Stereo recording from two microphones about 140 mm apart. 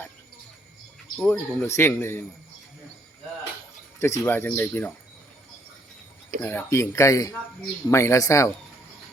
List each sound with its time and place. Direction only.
1.2 s speech: 10° left (ahead or behind)
4.0 s speech: 20° left (ahead or behind)
6.4 s speech: 15° left (ahead or behind)